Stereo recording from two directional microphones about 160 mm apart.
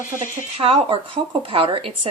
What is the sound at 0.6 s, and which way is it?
A woman's voice, 35° right (ahead or behind).